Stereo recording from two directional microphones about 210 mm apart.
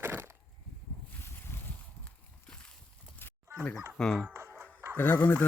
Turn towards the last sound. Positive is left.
turn(degrees=10)  # may be behind; listen again after turning